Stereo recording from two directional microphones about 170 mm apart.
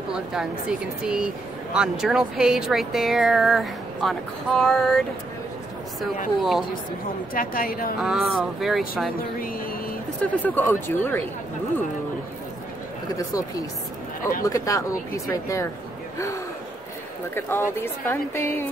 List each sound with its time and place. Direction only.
0.1 s speech: 5° right (ahead or behind)
7.3 s a woman's voice: 55° left (ahead or behind)
8.0 s speech: centre (ahead or behind)
10.4 s speech: 10° left (ahead or behind)
14.4 s speech: 20° left (ahead or behind)
17.4 s speech: 15° left (ahead or behind)